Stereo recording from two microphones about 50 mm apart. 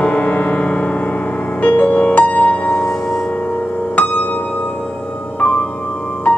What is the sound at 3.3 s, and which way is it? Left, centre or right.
Music, left.